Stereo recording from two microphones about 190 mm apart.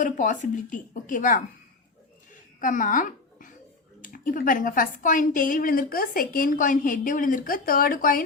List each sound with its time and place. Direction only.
0.0 s speech: 40° left (ahead or behind)
2.6 s a sound: 45° left (ahead or behind)
4.0 s speech: 45° left (ahead or behind)